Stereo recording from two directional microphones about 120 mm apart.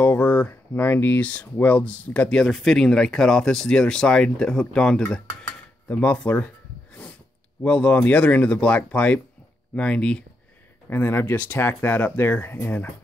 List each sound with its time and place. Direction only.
0.0 s speech: 15° left (ahead or behind)
7.6 s speech: 10° left (ahead or behind)